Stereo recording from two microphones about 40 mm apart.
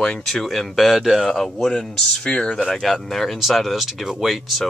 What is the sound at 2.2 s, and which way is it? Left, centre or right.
Speech, left.